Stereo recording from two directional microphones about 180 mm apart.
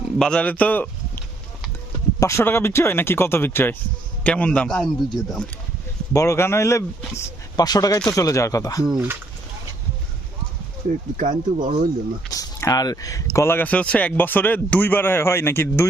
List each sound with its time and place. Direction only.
0.2 s speech: 5° left (ahead or behind)
2.1 s speech: 15° left (ahead or behind)
6.1 s speech: 15° left (ahead or behind)
8.9 s speech: 10° right (ahead or behind)
11.2 s speech: 45° right (ahead or behind)
12.3 s speech: 20° left (ahead or behind)